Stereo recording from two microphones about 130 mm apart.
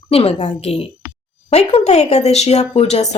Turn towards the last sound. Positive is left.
turn(degrees=55)  # may be behind; listen again after turning